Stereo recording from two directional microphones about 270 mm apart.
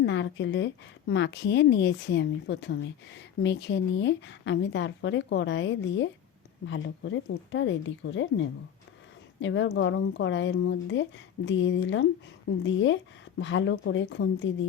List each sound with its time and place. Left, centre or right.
0.0 s a woman's voice: left